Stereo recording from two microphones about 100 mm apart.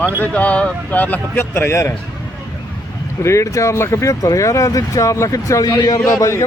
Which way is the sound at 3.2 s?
30° left (ahead or behind).